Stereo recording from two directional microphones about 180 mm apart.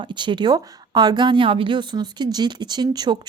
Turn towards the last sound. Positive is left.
turn(degrees=-20)  # may be behind; listen again after turning